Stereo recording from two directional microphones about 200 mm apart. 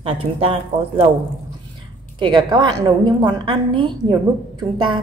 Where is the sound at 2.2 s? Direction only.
20° right (ahead or behind).